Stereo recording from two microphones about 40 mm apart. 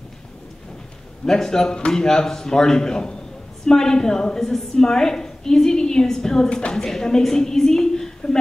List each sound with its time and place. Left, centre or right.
1.2 s a woman's voice: centre